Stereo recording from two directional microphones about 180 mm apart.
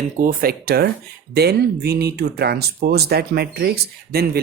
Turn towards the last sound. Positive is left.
turn(degrees=-60)  # may be behind; listen again after turning